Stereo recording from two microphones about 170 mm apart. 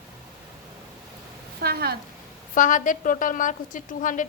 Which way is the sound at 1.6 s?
70° right (ahead or behind).